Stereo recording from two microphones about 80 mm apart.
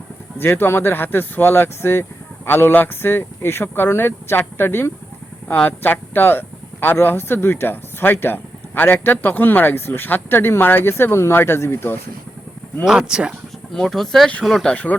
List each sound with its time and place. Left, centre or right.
0.3 s speech: left
12.8 s speech: centre
13.7 s speech: centre
14.7 s speech: centre